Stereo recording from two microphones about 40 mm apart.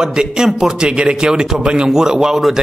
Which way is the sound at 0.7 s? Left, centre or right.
Right.